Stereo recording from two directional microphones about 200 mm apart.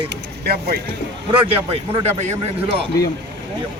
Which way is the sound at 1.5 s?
30° right (ahead or behind).